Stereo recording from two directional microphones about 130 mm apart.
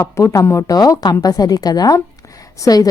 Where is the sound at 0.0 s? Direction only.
20° left (ahead or behind).